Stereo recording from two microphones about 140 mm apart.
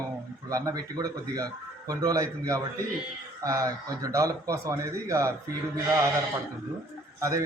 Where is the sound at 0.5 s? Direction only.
25° right (ahead or behind).